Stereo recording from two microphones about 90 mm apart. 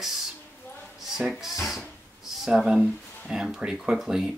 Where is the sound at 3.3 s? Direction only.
5° right (ahead or behind).